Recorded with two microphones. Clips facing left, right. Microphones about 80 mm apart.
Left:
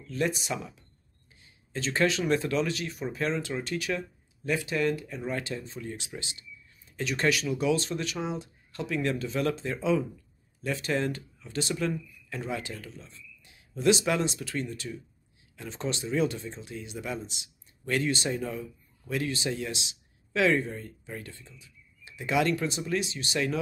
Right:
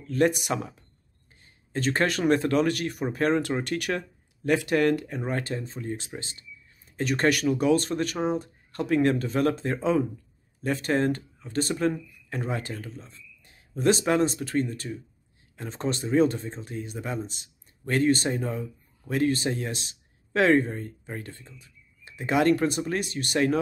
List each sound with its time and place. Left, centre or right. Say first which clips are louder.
0.0 s speech: right 7 dB; right